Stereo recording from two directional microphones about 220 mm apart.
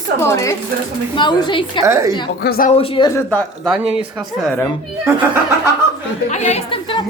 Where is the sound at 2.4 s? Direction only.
45° left (ahead or behind).